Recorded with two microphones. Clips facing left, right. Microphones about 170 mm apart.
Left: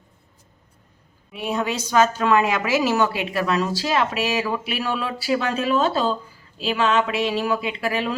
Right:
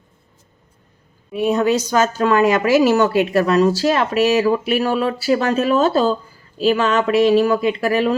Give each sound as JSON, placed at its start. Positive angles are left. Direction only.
{"t": 1.3, "sound": "a woman's voice", "side_deg": -40}